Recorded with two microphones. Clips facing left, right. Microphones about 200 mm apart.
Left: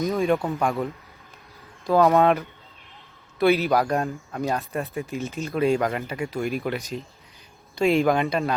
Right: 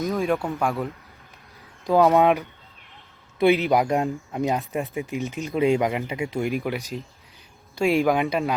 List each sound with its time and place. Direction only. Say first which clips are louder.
0.0 s speech: left 1 dB; centre (ahead or behind)
1.8 s speech: right 1 dB; 15° right (ahead or behind)
7.8 s speech: even; 15° right (ahead or behind)